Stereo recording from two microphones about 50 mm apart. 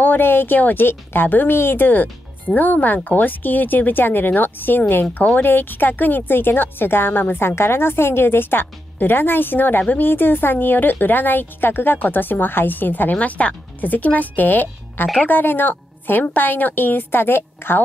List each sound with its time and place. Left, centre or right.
0.0 s a woman's voice: left
13.1 s a woman's voice: left